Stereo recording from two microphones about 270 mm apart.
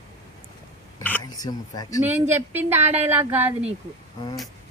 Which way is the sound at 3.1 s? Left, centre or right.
Centre.